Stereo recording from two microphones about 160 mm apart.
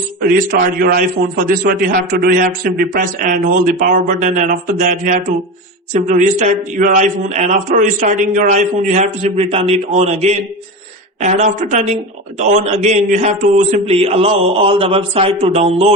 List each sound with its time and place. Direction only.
0.8 s a man's voice: 60° right (ahead or behind); by 15.9 s 40° right (ahead or behind)